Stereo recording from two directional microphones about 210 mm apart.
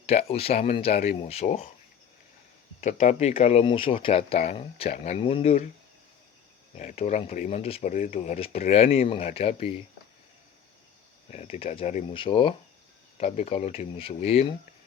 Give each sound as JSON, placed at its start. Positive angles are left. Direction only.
{"t": 0.0, "sound": "speech", "side_deg": 30}
{"t": 2.8, "sound": "speech", "side_deg": 30}
{"t": 6.7, "sound": "speech", "side_deg": 30}
{"t": 11.3, "sound": "speech", "side_deg": 35}